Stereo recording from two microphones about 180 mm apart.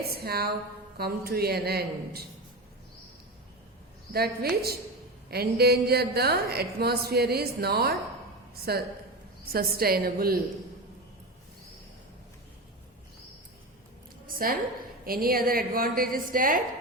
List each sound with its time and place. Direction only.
0.3 s a woman's voice: 60° right (ahead or behind)
4.1 s a woman's voice: 60° right (ahead or behind)
14.3 s a woman's voice: 50° right (ahead or behind)